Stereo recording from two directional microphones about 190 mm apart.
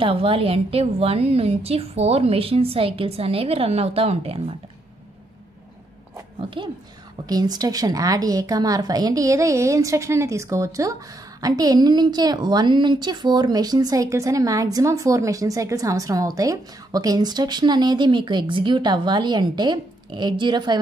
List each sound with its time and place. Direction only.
0.0 s a woman's voice: 30° right (ahead or behind)
6.6 s a woman's voice: 25° right (ahead or behind)